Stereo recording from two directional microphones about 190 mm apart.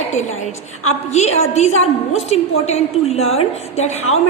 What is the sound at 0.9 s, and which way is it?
A woman's voice, 35° left (ahead or behind).